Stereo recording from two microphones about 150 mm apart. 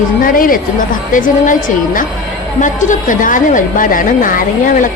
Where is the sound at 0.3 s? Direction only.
70° left (ahead or behind).